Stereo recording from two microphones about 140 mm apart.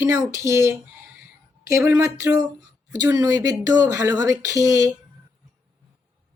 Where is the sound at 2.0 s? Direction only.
25° right (ahead or behind).